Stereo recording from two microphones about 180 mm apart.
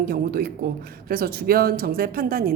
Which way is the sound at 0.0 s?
55° right (ahead or behind).